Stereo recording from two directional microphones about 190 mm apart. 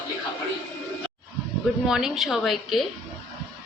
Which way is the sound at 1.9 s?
Centre (ahead or behind).